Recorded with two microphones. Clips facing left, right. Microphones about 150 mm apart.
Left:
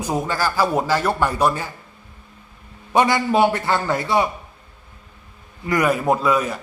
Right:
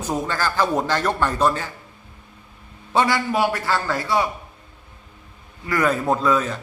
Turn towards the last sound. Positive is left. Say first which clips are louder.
# left 1 dB
turn(degrees=10)  # may be behind; listen again after turning